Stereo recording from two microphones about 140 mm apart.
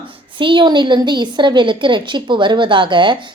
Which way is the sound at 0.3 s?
35° right (ahead or behind).